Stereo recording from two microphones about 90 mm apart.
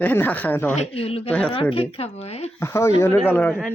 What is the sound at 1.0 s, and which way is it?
A woman's voice, 90° left.